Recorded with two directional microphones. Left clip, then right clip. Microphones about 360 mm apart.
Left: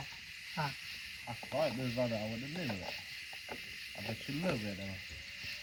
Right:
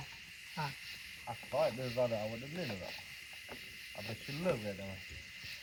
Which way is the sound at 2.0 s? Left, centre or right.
Centre.